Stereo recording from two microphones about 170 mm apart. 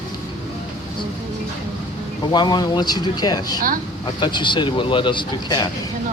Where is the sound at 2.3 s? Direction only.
25° left (ahead or behind).